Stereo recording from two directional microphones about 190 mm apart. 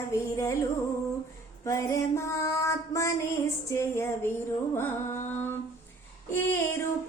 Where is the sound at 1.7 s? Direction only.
15° left (ahead or behind).